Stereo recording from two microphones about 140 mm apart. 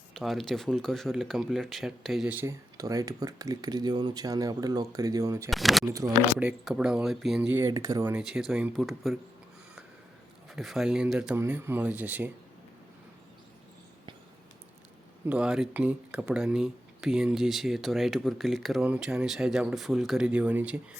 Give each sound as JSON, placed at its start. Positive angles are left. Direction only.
{"t": 0.1, "sound": "speech", "side_deg": 0}
{"t": 2.3, "sound": "speech", "side_deg": -20}
{"t": 5.5, "sound": "speech", "side_deg": 0}
{"t": 5.8, "sound": "speech", "side_deg": -25}
{"t": 6.4, "sound": "speech", "side_deg": -5}
{"t": 7.5, "sound": "speech", "side_deg": -20}
{"t": 8.1, "sound": "speech", "side_deg": -5}
{"t": 10.5, "sound": "speech", "side_deg": 0}
{"t": 11.3, "sound": "speech", "side_deg": -15}
{"t": 15.3, "sound": "speech", "side_deg": -5}